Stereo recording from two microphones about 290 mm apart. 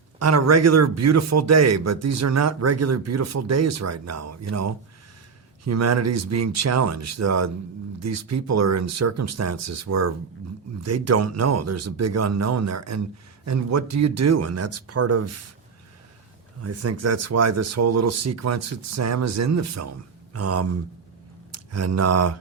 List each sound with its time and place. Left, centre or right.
0.2 s a man's voice: right
16.6 s a man's voice: right
20.3 s speech: right